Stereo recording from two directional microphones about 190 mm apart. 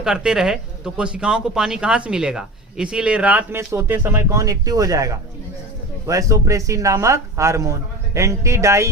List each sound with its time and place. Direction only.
0.0 s a man's voice: 5° right (ahead or behind)